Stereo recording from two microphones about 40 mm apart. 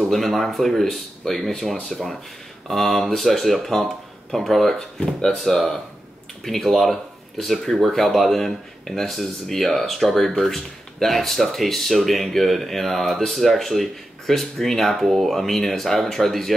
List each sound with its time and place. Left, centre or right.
0.1 s speech: centre
5.0 s speech: left
5.4 s speech: centre